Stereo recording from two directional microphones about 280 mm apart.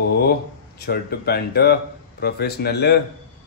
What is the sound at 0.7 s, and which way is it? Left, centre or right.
Speech, left.